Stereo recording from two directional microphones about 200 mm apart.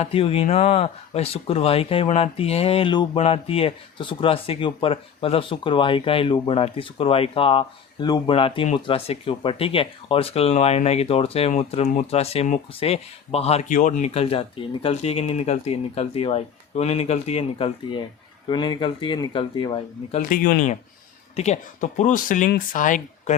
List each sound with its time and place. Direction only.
0.0 s speech: 30° left (ahead or behind)
20.3 s speech: 45° left (ahead or behind)